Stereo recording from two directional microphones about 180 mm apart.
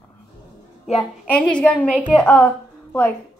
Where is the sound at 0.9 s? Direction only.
5° left (ahead or behind).